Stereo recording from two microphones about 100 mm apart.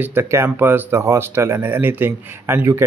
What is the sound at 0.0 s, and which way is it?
Speech, 25° right (ahead or behind).